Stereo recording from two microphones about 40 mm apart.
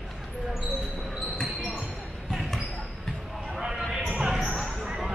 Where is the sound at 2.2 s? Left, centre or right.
Centre.